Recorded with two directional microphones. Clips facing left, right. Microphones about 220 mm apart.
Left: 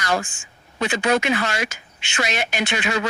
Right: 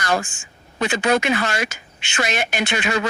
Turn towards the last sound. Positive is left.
turn(degrees=-50)  # may be behind; listen again after turning